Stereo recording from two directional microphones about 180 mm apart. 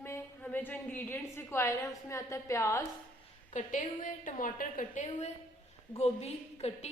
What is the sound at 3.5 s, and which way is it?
A woman's voice, 45° left (ahead or behind).